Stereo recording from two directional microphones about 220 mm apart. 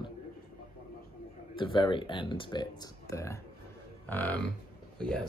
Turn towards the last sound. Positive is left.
turn(degrees=5)  # may be behind; listen again after turning